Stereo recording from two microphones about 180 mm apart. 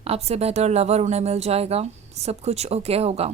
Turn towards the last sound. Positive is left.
turn(degrees=-35)  # may be behind; listen again after turning